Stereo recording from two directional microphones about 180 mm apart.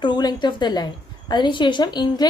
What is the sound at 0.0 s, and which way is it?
A woman's voice, 25° left (ahead or behind).